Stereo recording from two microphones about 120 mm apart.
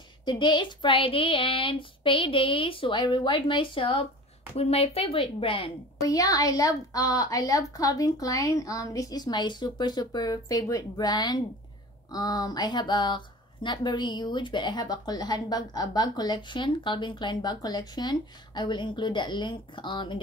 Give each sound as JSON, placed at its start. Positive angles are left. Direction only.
{"t": 0.2, "sound": "speech", "side_deg": 40}
{"t": 4.6, "sound": "speech", "side_deg": 55}
{"t": 6.0, "sound": "a woman's voice", "side_deg": 30}